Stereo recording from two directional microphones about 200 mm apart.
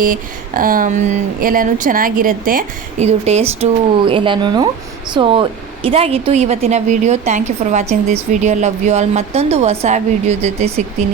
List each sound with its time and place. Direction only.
0.0 s speech: 45° right (ahead or behind)